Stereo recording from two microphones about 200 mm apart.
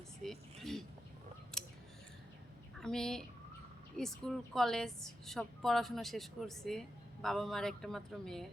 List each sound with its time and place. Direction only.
0.2 s a sound: centre (ahead or behind)
1.5 s scissors: 5° left (ahead or behind)
2.8 s a woman's voice: 5° left (ahead or behind)